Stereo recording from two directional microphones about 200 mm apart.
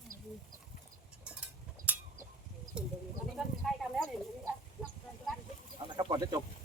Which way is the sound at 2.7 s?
5° right (ahead or behind).